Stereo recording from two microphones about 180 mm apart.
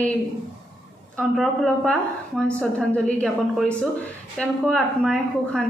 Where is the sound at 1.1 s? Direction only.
Centre (ahead or behind).